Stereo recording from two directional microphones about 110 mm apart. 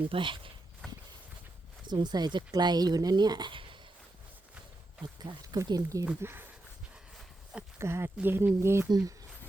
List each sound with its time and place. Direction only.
0.1 s speech: 50° right (ahead or behind)
1.9 s speech: 40° right (ahead or behind)
5.0 s speech: 40° right (ahead or behind)
6.2 s speech: 20° right (ahead or behind)
7.8 s speech: 25° right (ahead or behind)
8.9 s speech: 35° right (ahead or behind)